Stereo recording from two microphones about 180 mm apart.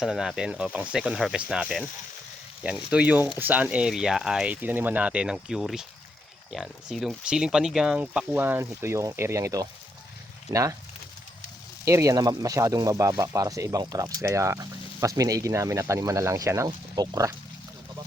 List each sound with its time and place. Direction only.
0.0 s speech: centre (ahead or behind); by 10.8 s 15° right (ahead or behind)
11.9 s speech: 15° right (ahead or behind)